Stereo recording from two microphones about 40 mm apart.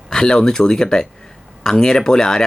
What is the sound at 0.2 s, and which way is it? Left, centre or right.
Speech, centre.